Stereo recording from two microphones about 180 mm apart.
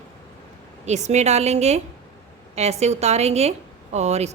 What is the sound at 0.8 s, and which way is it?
A woman's voice, 40° right (ahead or behind).